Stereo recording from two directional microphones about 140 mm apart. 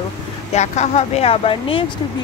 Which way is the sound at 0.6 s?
55° left (ahead or behind).